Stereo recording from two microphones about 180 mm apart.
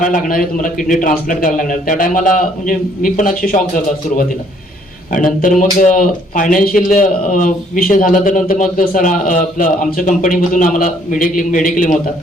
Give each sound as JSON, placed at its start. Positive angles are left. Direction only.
{"t": 0.0, "sound": "a man's voice", "side_deg": 50}
{"t": 5.1, "sound": "a man's voice", "side_deg": 45}